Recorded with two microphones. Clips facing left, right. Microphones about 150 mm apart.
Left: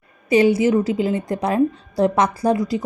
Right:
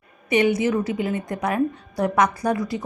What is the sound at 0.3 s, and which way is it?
A woman's voice, 30° left (ahead or behind).